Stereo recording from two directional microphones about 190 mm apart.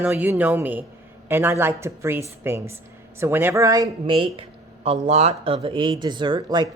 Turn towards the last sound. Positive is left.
turn(degrees=-20)  # may be behind; listen again after turning